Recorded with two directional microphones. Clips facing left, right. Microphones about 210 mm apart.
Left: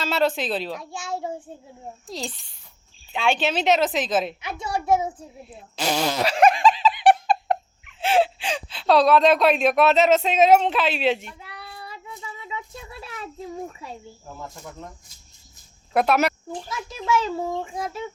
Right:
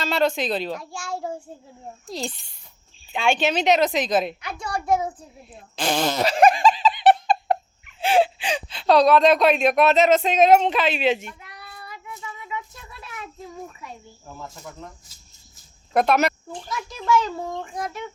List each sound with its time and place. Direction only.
0.0 s speech: 5° left (ahead or behind)
0.9 s a child's voice: 20° left (ahead or behind)
2.0 s speech: centre (ahead or behind)
4.5 s a child's voice: 25° left (ahead or behind)
5.5 s speech: 5° left (ahead or behind)
11.3 s child singing: 30° left (ahead or behind)
15.9 s speech: 5° left (ahead or behind)